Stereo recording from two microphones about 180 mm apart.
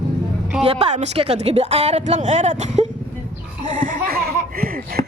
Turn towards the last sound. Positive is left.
turn(degrees=-55)  # may be behind; listen again after turning